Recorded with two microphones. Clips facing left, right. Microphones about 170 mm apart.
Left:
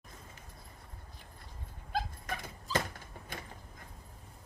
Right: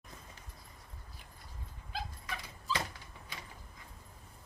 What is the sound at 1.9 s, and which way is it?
Dog, 50° left (ahead or behind).